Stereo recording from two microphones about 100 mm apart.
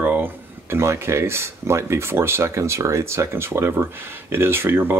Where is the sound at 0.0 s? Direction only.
20° right (ahead or behind).